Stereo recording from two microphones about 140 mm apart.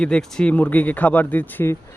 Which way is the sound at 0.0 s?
5° left (ahead or behind).